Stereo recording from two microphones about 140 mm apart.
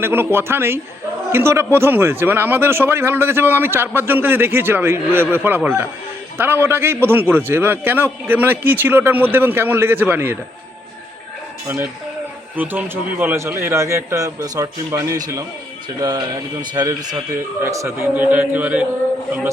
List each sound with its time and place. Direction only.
0.0 s speech: 15° right (ahead or behind)
12.5 s a man's voice: 10° right (ahead or behind)